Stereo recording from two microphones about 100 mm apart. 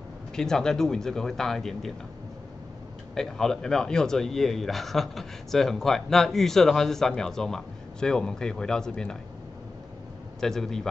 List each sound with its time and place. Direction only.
0.4 s a man's voice: 5° left (ahead or behind)
3.2 s a man's voice: 5° left (ahead or behind)
10.4 s a man's voice: 5° left (ahead or behind)